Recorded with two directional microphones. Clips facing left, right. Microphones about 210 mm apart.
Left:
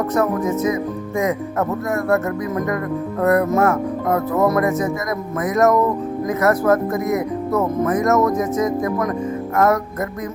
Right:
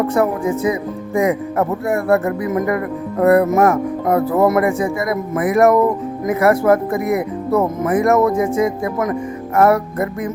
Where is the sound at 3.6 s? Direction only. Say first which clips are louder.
Right 3 dB; 15° right (ahead or behind).